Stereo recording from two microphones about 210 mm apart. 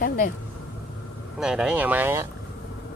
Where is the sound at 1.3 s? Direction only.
5° right (ahead or behind).